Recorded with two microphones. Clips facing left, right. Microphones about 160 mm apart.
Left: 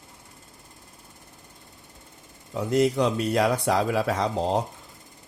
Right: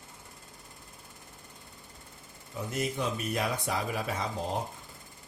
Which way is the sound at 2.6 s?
80° left.